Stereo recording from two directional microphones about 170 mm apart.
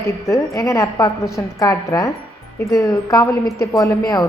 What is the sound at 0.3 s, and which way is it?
A woman's voice, 20° left (ahead or behind).